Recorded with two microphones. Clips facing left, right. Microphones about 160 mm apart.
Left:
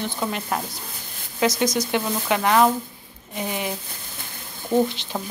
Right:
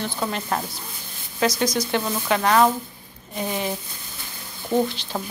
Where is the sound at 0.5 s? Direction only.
10° left (ahead or behind).